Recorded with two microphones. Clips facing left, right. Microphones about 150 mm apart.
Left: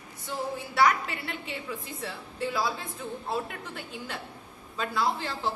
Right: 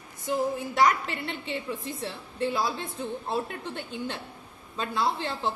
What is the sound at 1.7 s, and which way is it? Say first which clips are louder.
A woman's voice: right 3 dB; 30° right (ahead or behind).